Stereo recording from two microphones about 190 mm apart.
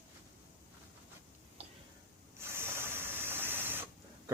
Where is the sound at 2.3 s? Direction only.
15° right (ahead or behind).